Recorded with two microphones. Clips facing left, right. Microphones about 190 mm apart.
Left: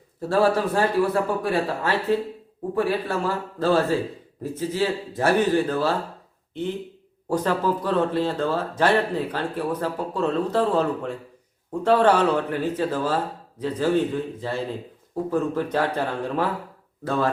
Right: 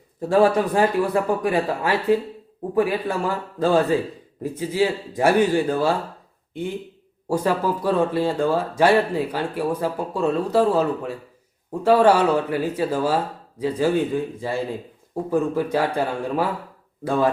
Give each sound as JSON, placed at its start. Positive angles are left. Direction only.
{"t": 0.2, "sound": "speech", "side_deg": -15}